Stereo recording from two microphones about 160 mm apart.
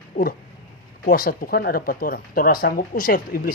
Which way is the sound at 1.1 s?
60° left (ahead or behind).